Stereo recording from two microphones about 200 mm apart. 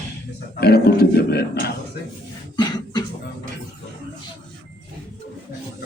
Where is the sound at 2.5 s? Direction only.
20° left (ahead or behind).